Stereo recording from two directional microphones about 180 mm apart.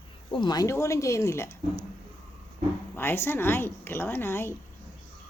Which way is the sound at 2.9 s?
10° left (ahead or behind).